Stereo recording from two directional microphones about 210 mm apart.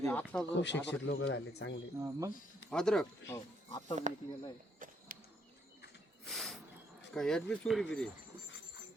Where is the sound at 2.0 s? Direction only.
15° right (ahead or behind).